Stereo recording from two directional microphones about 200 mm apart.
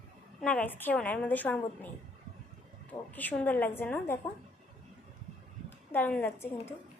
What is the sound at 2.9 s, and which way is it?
A woman's voice, 10° left (ahead or behind).